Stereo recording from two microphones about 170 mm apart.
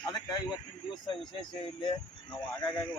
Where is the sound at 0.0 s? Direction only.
25° left (ahead or behind).